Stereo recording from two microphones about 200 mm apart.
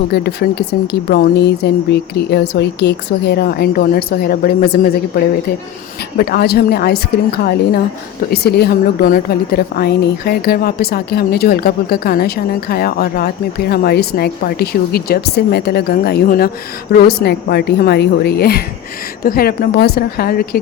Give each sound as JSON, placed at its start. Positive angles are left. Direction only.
{"t": 0.1, "sound": "a woman's voice", "side_deg": 55}